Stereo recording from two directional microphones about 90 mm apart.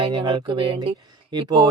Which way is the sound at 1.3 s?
60° right (ahead or behind).